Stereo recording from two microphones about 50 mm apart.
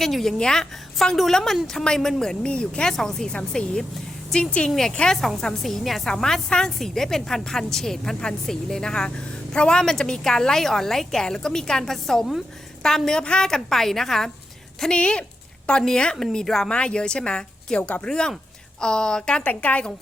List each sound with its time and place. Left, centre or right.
0.0 s a woman's voice: centre
2.5 s a woman's voice: left
2.9 s a woman's voice: centre
4.7 s a woman's voice: centre
14.8 s a woman's voice: centre
16.6 s a woman's voice: left
19.5 s a woman's voice: left